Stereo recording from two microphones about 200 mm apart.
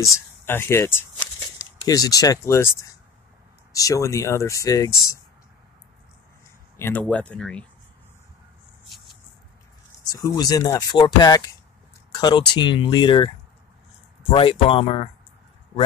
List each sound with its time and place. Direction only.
0.0 s speech: 10° left (ahead or behind)
6.8 s speech: 10° left (ahead or behind)
10.1 s speech: 20° left (ahead or behind)
14.3 s speech: 25° left (ahead or behind)